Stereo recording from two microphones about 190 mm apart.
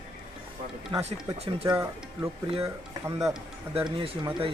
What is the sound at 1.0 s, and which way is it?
Speech, 30° right (ahead or behind).